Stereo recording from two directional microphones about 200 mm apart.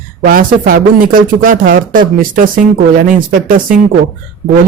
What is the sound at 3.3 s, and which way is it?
Speech, 45° right (ahead or behind).